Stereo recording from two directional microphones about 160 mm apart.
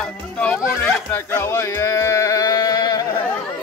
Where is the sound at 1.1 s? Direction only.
15° left (ahead or behind).